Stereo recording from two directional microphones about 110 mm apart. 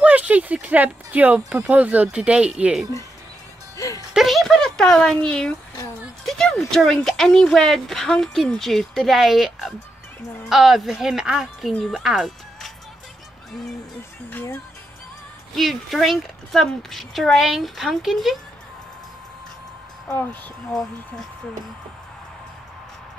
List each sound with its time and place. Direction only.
0.0 s speech: 15° right (ahead or behind)
3.7 s music: 30° left (ahead or behind)
4.1 s a woman's voice: centre (ahead or behind)
14.3 s speech: 20° left (ahead or behind)
15.5 s a woman's voice: centre (ahead or behind)